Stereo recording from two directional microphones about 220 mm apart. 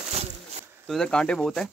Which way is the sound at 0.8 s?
Centre (ahead or behind).